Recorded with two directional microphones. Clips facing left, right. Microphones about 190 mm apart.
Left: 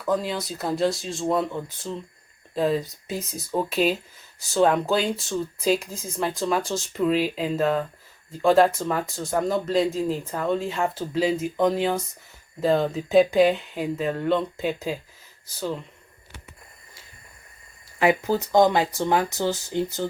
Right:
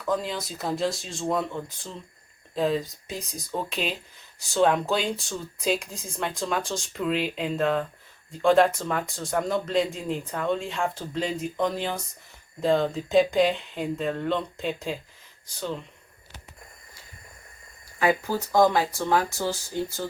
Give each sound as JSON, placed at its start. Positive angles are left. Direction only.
{"t": 0.0, "sound": "speech", "side_deg": 0}
{"t": 18.0, "sound": "speech", "side_deg": 20}